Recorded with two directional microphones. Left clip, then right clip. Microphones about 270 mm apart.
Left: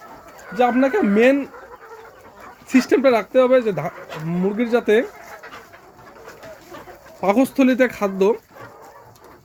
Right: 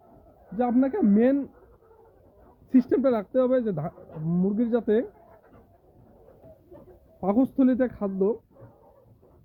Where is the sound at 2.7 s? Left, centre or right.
Centre.